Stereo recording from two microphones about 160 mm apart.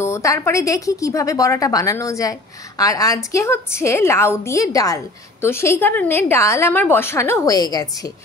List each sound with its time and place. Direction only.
0.0 s a woman's voice: 20° left (ahead or behind)